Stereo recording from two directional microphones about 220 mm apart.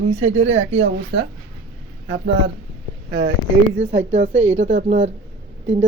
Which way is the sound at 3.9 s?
35° right (ahead or behind).